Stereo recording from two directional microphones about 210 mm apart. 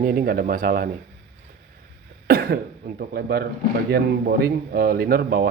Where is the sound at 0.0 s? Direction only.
45° right (ahead or behind).